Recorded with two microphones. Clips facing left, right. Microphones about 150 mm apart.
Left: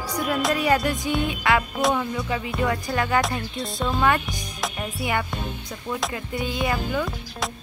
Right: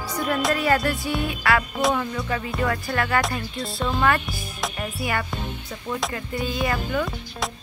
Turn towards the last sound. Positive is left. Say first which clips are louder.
# right 1 dB
turn(degrees=0)  # may be behind; listen again after turning